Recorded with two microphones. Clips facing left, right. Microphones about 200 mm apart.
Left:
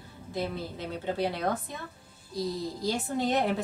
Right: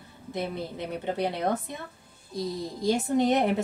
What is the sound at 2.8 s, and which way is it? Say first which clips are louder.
Speech: right 6 dB; 20° right (ahead or behind).